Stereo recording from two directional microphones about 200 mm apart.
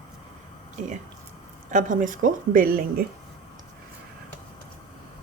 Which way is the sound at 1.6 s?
40° right (ahead or behind).